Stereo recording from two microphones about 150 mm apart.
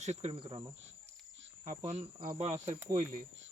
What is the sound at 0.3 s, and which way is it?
Cricket, 35° right (ahead or behind).